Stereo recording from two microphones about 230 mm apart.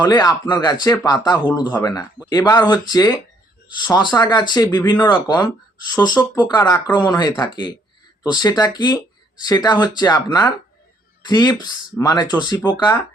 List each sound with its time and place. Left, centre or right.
0.0 s speech: centre